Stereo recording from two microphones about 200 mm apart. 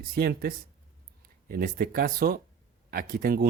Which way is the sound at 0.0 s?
45° right (ahead or behind).